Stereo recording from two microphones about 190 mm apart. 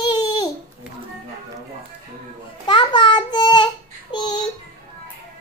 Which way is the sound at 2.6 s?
25° left (ahead or behind).